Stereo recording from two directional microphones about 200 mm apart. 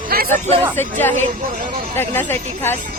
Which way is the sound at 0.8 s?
10° left (ahead or behind).